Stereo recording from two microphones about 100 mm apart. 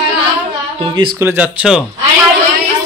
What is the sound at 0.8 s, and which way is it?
Speech, 55° right (ahead or behind).